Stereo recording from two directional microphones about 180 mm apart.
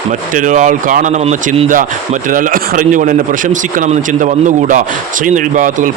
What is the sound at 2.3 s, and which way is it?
Speech, 50° right (ahead or behind).